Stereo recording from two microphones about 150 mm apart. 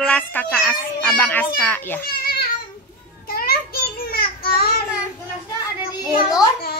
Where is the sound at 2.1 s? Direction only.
90° left.